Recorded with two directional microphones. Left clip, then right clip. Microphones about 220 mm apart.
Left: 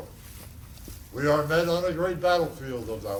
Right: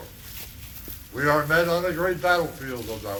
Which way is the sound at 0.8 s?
Centre (ahead or behind).